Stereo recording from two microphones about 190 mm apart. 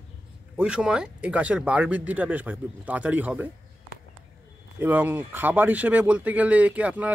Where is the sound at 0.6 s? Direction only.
5° right (ahead or behind).